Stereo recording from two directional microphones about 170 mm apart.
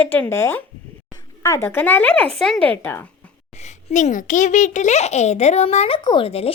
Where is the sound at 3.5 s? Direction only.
40° left (ahead or behind).